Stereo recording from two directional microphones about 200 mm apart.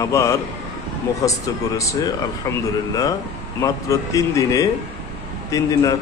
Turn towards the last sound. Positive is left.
turn(degrees=15)  # may be behind; listen again after turning